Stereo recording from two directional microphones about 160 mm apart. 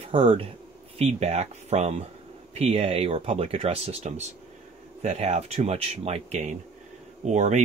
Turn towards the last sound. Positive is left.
turn(degrees=-45)  # may be behind; listen again after turning